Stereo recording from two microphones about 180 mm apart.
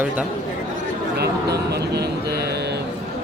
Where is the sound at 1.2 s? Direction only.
65° right (ahead or behind).